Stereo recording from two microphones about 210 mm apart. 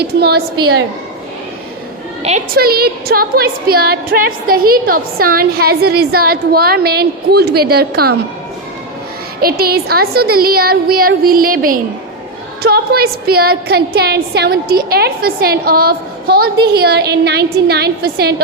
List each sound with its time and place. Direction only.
0.0 s a woman's voice: 50° right (ahead or behind)
2.6 s a woman's voice: 45° right (ahead or behind)
9.4 s a woman's voice: 45° right (ahead or behind)